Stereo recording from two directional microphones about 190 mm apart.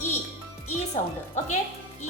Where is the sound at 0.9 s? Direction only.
40° left (ahead or behind).